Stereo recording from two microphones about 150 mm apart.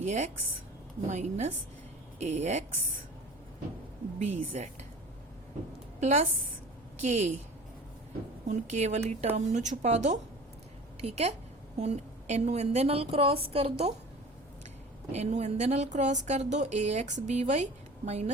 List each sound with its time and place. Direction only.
0.0 s speech: 50° right (ahead or behind)
4.2 s speech: 50° right (ahead or behind)
6.0 s a woman's voice: 50° right (ahead or behind)
8.4 s a woman's voice: 55° right (ahead or behind)
15.1 s speech: 45° right (ahead or behind)